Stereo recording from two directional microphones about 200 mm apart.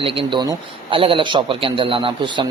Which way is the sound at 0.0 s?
25° right (ahead or behind).